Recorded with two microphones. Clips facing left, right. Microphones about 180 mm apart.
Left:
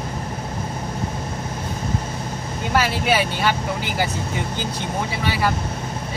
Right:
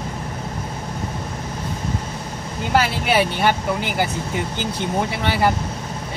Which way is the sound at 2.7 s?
60° right (ahead or behind).